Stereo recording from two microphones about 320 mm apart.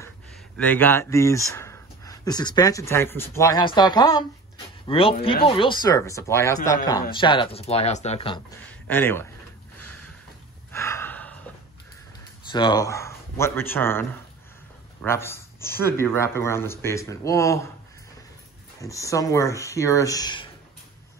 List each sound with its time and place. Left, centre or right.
0.6 s speech: centre
8.6 s speech: centre
10.7 s gasp: centre
12.4 s speech: centre
18.8 s speech: centre